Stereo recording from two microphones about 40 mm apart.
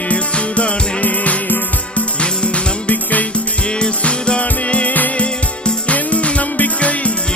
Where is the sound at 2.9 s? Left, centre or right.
Left.